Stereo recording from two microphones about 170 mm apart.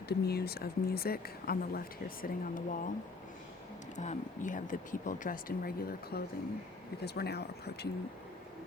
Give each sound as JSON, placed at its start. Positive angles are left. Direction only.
{"t": 0.1, "sound": "speech", "side_deg": 70}
{"t": 3.9, "sound": "speech", "side_deg": 45}